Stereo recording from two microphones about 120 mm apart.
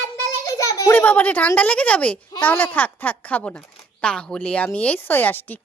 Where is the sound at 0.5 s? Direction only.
30° left (ahead or behind).